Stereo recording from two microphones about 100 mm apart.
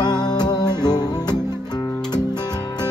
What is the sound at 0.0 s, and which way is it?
Music, 45° left (ahead or behind).